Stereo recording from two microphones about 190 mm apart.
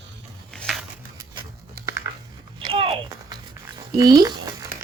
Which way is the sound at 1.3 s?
15° right (ahead or behind).